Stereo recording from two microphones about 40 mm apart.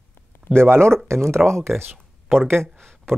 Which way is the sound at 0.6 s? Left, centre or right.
Right.